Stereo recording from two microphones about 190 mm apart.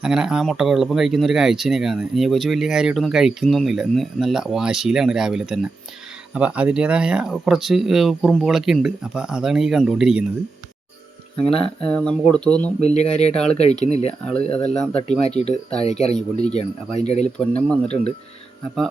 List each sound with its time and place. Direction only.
0.0 s speech: 5° right (ahead or behind)
11.3 s speech: 30° left (ahead or behind)
11.9 s speech: 5° left (ahead or behind)
12.8 s speech: 35° left (ahead or behind)
13.3 s speech: 5° left (ahead or behind)
13.6 s speech: 35° left (ahead or behind)
14.6 s speech: 5° left (ahead or behind)
15.2 s speech: 35° left (ahead or behind)
17.3 s speech: 5° left (ahead or behind)